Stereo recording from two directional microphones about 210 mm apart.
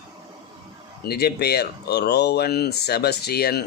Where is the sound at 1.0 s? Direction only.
50° left (ahead or behind).